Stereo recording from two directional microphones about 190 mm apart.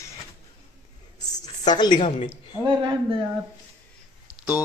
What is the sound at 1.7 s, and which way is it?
Speech, 25° left (ahead or behind).